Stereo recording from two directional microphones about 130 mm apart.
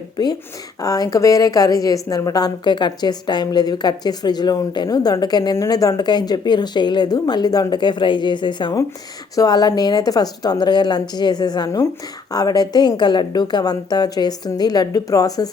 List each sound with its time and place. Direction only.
0.2 s a woman's voice: 30° left (ahead or behind)